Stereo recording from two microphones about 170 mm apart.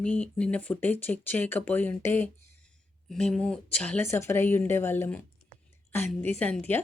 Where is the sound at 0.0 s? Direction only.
10° left (ahead or behind).